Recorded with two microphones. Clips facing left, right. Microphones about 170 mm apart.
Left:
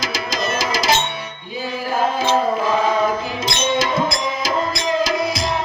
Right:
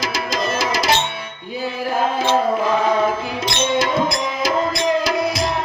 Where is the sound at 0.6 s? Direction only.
60° right (ahead or behind).